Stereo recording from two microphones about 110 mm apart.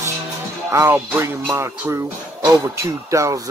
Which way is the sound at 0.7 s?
25° right (ahead or behind).